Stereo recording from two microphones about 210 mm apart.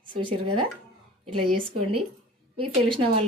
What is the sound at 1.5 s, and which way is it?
A woman's voice, 25° right (ahead or behind).